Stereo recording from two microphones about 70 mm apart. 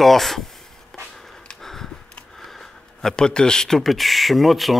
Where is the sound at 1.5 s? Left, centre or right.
Centre.